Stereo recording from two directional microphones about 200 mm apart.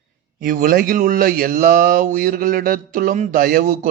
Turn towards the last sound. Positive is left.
turn(degrees=-45)  # may be behind; listen again after turning